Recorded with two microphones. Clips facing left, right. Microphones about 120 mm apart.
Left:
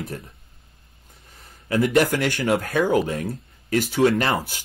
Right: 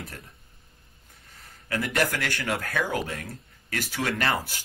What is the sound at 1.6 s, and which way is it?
Speech, 20° left (ahead or behind).